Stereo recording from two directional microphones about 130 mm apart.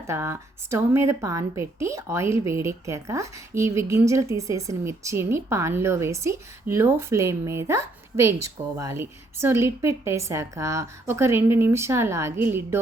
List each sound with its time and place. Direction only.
0.1 s a woman's voice: 20° right (ahead or behind)